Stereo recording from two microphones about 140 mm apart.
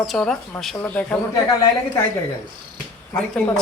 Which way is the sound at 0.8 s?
10° left (ahead or behind).